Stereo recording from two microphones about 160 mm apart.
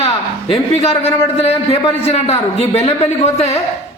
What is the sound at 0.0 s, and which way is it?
A man's voice, 35° left (ahead or behind).